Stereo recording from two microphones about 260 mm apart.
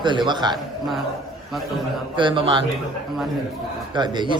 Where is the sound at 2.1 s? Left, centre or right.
Centre.